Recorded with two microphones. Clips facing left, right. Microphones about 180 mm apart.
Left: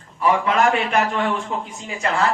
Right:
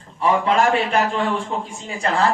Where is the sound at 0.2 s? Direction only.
30° right (ahead or behind).